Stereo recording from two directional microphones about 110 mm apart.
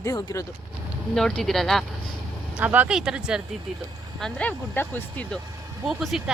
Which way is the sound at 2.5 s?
15° right (ahead or behind).